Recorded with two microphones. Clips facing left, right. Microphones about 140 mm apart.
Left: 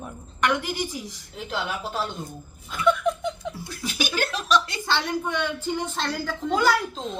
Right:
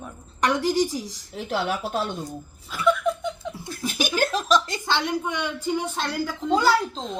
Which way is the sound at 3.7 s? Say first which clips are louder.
Right 3 dB; 50° right (ahead or behind).